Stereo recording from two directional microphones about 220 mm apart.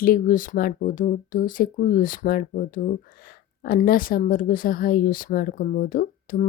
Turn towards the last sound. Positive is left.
turn(degrees=40)  # may be behind; listen again after turning